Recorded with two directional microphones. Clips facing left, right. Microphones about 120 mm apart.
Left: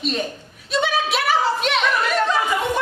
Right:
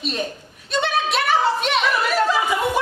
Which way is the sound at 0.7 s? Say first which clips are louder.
Left 1 dB; centre (ahead or behind).